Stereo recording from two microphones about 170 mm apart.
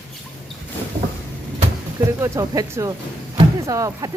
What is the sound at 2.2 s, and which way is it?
Speech, 20° right (ahead or behind).